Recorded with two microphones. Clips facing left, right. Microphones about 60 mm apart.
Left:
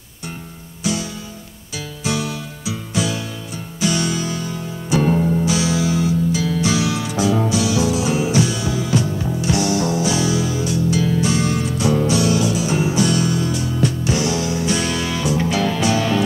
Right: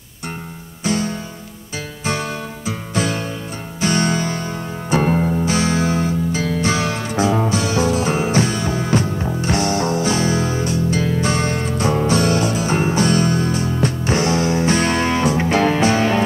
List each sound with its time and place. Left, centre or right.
0.8 s music: right